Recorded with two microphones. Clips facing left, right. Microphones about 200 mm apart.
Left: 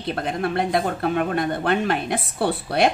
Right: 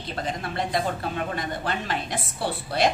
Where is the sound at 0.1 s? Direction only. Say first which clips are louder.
Left 7 dB; 60° left (ahead or behind).